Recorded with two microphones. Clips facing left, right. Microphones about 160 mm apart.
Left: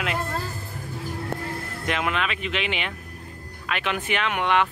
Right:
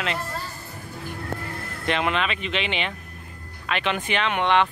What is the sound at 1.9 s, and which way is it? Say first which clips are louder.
Speech: right 2 dB; 5° left (ahead or behind).